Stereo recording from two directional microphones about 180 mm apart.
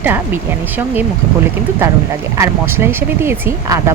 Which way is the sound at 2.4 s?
15° right (ahead or behind).